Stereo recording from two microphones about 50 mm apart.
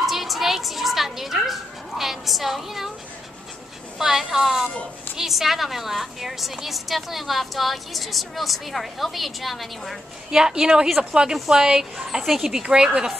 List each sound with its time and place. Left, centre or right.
0.0 s bow-wow: centre
4.0 s a sound: centre
5.1 s a woman's voice: centre
10.3 s a woman's voice: centre
12.6 s a woman's voice: centre